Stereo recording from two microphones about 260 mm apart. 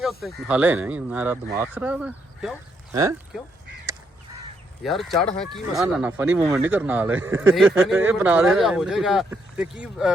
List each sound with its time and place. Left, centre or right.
0.0 s speech: centre
3.9 s crow: centre
4.8 s speech: centre